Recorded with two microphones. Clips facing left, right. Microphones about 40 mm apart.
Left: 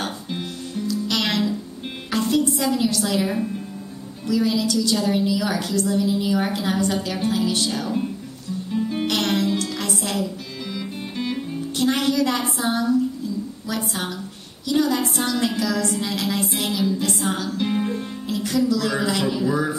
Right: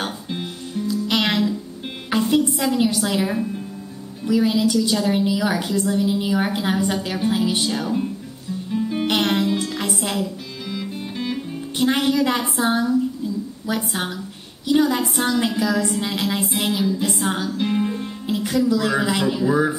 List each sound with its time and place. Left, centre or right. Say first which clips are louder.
0.0 s music: right 1 dB; centre
0.8 s music: right 3 dB; right
4.3 s a woman's voice: right 3 dB; centre
8.7 s music: right 1 dB; centre
9.0 s music: right 3 dB; centre
11.8 s a woman's voice: right 2 dB; centre
17.1 s music: right 1 dB; centre
18.2 s music: right 3 dB; centre
18.7 s a woman's voice: right 2 dB; centre